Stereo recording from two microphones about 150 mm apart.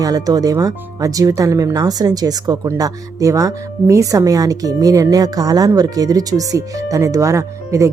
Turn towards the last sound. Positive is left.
turn(degrees=-20)  # may be behind; listen again after turning